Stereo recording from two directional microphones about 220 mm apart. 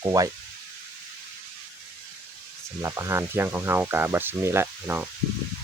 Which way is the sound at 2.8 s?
15° right (ahead or behind).